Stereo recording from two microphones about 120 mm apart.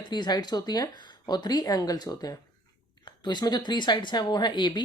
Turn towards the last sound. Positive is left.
turn(degrees=40)  # may be behind; listen again after turning